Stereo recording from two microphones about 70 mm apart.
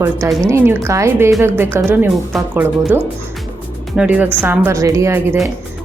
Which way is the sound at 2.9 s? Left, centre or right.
Right.